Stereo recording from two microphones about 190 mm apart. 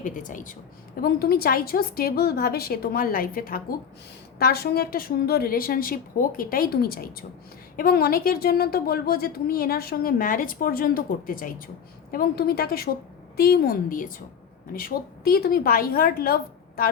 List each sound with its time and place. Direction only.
0.0 s a woman's voice: 45° left (ahead or behind)
0.9 s a woman's voice: 55° left (ahead or behind)